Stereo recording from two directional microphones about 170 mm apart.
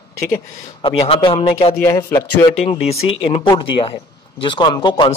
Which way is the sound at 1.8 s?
20° left (ahead or behind).